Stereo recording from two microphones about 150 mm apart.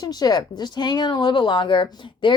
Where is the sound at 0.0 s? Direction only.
25° left (ahead or behind).